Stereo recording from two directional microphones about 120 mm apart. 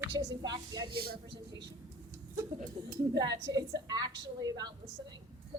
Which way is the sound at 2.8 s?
30° right (ahead or behind).